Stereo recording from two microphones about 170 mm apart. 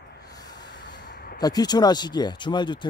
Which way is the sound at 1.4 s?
25° left (ahead or behind).